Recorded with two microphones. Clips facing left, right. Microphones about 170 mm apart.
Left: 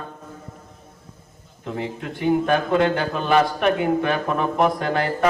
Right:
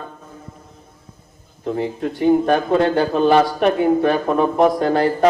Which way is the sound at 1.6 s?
35° right (ahead or behind).